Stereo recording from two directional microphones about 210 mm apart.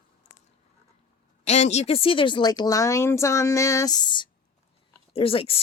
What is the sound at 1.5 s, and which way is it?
A woman's voice, 30° left (ahead or behind).